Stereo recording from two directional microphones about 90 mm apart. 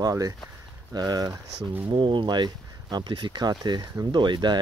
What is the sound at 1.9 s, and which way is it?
Speech, 65° right (ahead or behind).